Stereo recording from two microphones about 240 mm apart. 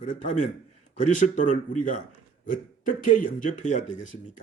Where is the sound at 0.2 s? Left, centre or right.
Left.